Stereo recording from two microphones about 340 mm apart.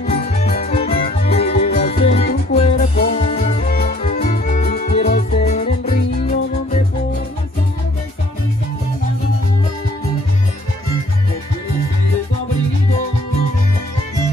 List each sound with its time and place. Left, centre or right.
0.0 s music: centre